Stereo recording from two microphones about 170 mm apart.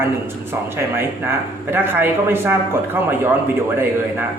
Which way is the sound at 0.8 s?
15° right (ahead or behind).